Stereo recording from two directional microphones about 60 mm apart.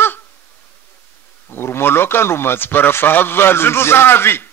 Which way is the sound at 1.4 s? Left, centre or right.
Left.